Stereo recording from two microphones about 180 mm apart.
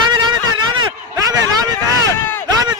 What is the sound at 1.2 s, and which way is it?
Vehicle, 20° right (ahead or behind).